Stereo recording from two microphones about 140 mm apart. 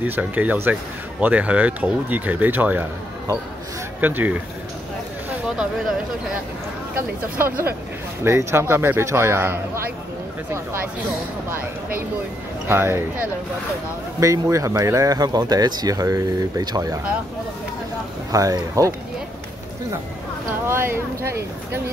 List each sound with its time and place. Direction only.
0.0 s a man's voice: 10° right (ahead or behind)
4.0 s a man's voice: 10° right (ahead or behind)
5.6 s speech: 5° right (ahead or behind)
7.3 s a man's voice: 15° right (ahead or behind)
12.6 s a man's voice: 15° right (ahead or behind)
14.2 s speech: 25° right (ahead or behind)
18.3 s speech: 25° right (ahead or behind)
20.6 s a man's voice: 15° right (ahead or behind)